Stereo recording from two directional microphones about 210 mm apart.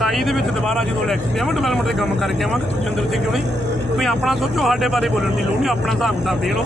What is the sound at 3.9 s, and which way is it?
Speech, centre (ahead or behind).